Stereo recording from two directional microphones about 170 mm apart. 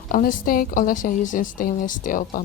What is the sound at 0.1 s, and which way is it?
A woman's voice, 55° left (ahead or behind).